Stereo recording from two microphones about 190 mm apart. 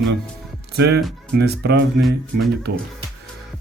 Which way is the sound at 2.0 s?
Centre (ahead or behind).